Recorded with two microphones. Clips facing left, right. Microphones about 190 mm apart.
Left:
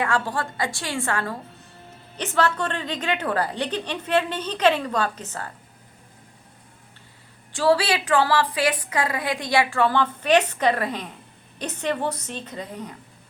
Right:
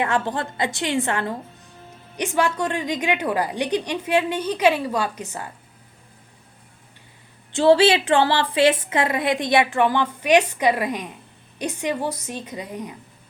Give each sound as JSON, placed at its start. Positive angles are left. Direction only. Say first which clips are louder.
{"t": 0.0, "sound": "a woman's voice", "louder": "right 2 dB", "side_deg": -20}
{"t": 7.5, "sound": "a woman's voice", "louder": "right 5 dB", "side_deg": -25}